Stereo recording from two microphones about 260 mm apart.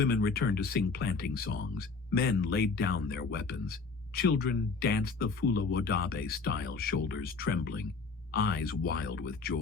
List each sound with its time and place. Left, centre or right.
0.0 s speech: left